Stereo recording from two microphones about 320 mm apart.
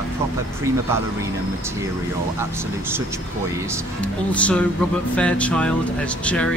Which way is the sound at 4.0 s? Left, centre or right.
Centre.